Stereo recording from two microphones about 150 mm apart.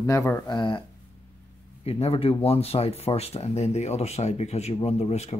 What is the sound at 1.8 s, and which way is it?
Speech, 40° left (ahead or behind).